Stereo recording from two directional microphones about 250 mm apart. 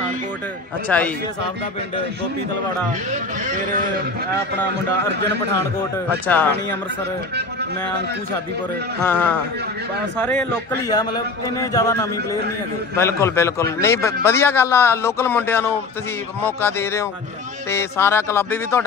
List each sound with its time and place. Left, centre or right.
0.8 s a man's voice: centre
6.2 s speech: centre
9.0 s a man's voice: centre
10.9 s speech: centre